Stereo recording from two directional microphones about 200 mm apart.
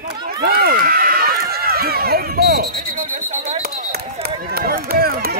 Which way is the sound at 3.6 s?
50° right (ahead or behind).